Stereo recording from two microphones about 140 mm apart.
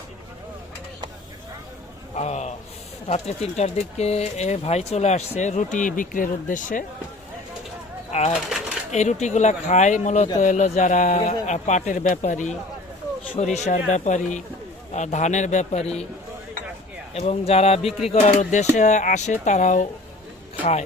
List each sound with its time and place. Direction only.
2.1 s a sound: 55° left (ahead or behind)
3.1 s speech: 50° left (ahead or behind)
5.7 s speech: 70° left (ahead or behind)
8.3 s speech: 5° right (ahead or behind)
8.9 s a man's voice: 55° left (ahead or behind)
17.2 s a man's voice: 45° left (ahead or behind)